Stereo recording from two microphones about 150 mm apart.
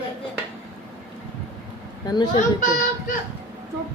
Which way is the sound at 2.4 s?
55° left (ahead or behind).